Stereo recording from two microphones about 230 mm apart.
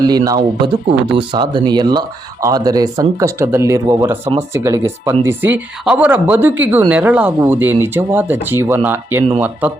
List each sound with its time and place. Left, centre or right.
0.0 s speech: centre